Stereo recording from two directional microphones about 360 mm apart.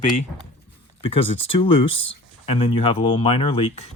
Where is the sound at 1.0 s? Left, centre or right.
Centre.